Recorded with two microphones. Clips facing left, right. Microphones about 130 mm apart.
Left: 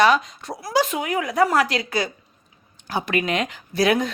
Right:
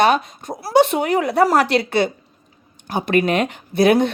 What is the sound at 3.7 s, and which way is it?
Speech, 55° right (ahead or behind).